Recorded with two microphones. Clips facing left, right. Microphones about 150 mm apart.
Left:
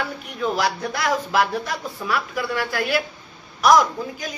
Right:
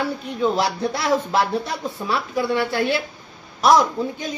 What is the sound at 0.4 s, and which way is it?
A man's voice, 25° right (ahead or behind).